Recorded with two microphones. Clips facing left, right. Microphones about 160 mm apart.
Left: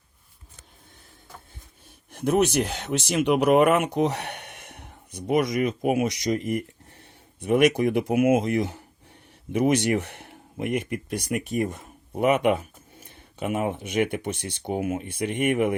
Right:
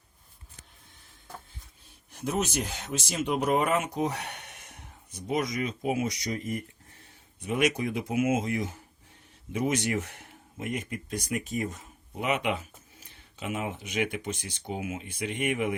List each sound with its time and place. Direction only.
2.1 s speech: 60° left (ahead or behind)
7.0 s speech: 60° left (ahead or behind)